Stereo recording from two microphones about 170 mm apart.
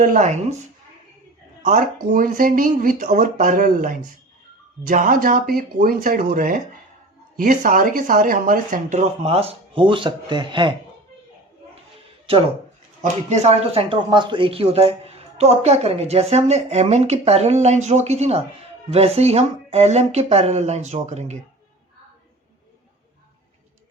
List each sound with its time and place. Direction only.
0.0 s speech: 50° right (ahead or behind)
1.6 s speech: 50° right (ahead or behind); by 10.8 s 30° right (ahead or behind)
13.0 s speech: 40° right (ahead or behind)